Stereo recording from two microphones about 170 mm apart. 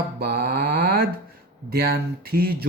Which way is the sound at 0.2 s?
65° right (ahead or behind).